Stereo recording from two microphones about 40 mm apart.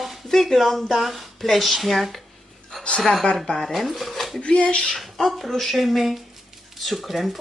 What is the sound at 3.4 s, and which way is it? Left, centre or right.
Speech, left.